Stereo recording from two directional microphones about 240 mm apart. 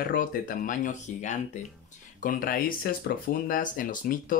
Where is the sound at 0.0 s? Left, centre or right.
Left.